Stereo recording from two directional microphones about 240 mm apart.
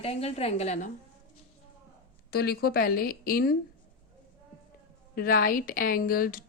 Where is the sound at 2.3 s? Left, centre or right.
Left.